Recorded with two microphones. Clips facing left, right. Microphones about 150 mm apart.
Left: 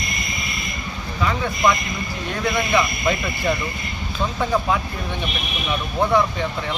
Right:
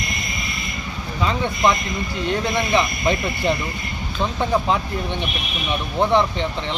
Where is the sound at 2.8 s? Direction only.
25° right (ahead or behind).